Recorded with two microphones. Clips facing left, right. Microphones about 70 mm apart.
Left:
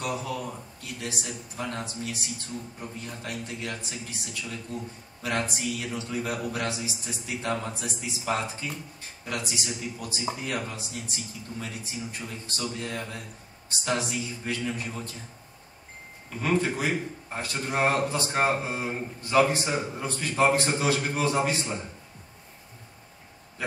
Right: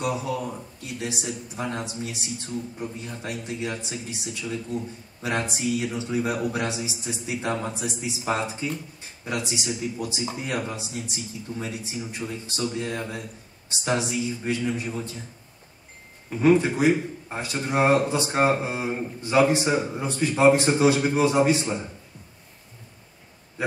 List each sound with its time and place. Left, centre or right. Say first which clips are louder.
0.0 s speech: right 4 dB; right
1.6 s a man's voice: right 2 dB; centre
16.3 s a man's voice: right 7 dB; right